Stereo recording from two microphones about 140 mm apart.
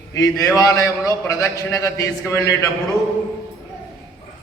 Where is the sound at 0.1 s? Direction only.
25° left (ahead or behind).